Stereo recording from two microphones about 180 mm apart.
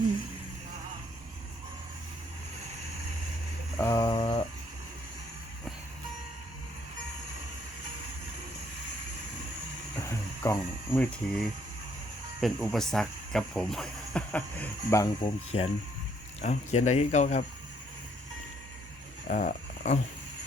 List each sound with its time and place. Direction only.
3.8 s a sound: 15° left (ahead or behind)
10.0 s speech: 15° left (ahead or behind)
16.4 s speech: 40° left (ahead or behind)
19.3 s speech: 45° left (ahead or behind)